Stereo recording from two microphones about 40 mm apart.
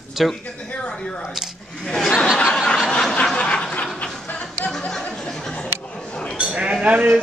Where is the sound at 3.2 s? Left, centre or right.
Left.